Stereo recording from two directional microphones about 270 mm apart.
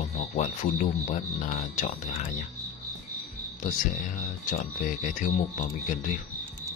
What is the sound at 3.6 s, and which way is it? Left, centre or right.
Speech, left.